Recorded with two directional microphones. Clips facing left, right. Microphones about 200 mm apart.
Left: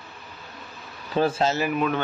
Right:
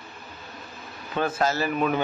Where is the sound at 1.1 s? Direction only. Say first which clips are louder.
Left 3 dB; 30° left (ahead or behind).